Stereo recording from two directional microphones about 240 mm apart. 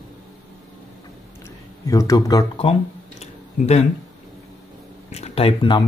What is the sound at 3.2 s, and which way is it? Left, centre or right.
Tick-tock, left.